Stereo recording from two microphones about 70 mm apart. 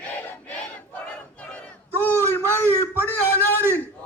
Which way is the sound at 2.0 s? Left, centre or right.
Left.